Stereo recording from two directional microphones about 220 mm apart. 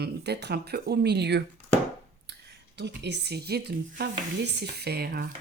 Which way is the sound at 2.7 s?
50° right (ahead or behind).